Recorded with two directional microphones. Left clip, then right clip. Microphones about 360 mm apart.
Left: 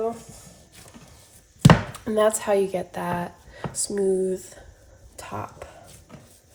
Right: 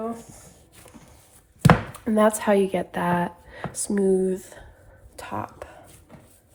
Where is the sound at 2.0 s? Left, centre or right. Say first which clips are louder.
Right 1 dB; centre.